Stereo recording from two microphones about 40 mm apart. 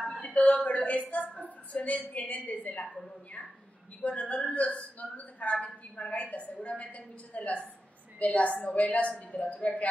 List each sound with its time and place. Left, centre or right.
0.2 s a woman's voice: left
1.4 s a sound: left
2.1 s a woman's voice: left
4.0 s a woman's voice: left